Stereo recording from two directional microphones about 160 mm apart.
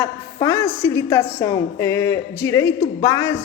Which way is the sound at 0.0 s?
20° left (ahead or behind).